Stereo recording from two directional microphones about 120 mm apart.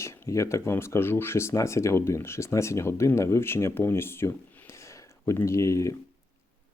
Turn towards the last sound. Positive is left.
turn(degrees=25)  # may be behind; listen again after turning